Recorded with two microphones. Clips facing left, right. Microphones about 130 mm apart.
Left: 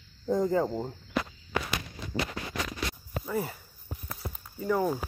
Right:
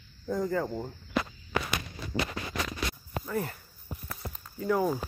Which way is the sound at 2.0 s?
20° left (ahead or behind).